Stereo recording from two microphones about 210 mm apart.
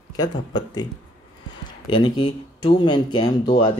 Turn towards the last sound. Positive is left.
turn(degrees=20)  # may be behind; listen again after turning